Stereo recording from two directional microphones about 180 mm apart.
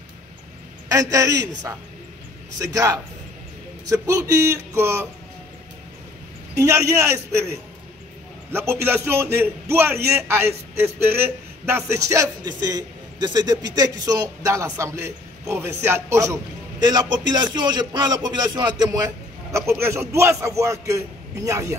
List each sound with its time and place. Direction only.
0.8 s a man's voice: 20° right (ahead or behind)
6.6 s a man's voice: 15° right (ahead or behind)